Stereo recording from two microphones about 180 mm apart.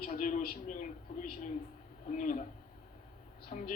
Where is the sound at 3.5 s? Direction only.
45° left (ahead or behind).